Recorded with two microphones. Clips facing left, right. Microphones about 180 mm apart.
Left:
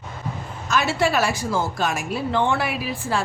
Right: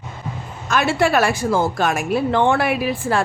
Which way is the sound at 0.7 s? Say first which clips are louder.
Right 4 dB; 55° right (ahead or behind).